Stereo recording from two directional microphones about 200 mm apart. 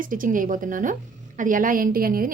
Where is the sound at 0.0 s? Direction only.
45° right (ahead or behind).